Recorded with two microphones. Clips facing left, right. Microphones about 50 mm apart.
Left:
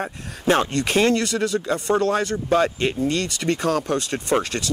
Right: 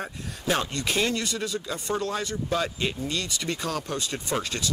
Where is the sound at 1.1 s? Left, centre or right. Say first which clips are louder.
Left 8 dB; left.